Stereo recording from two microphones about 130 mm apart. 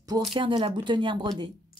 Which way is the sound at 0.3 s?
40° right (ahead or behind).